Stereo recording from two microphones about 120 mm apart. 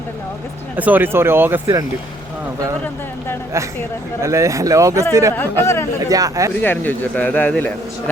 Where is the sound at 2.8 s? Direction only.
15° left (ahead or behind).